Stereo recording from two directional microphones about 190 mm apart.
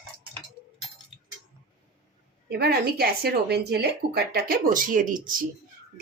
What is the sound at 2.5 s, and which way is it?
Speech, 55° right (ahead or behind).